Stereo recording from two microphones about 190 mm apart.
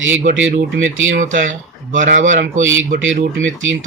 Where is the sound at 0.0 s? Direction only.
85° right.